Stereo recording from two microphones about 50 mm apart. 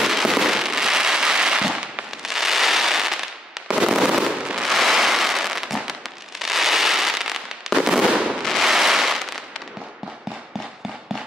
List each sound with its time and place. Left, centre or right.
0.0 s fireworks: centre
4.6 s fireworks: centre
8.1 s fireworks: centre
8.4 s fireworks: centre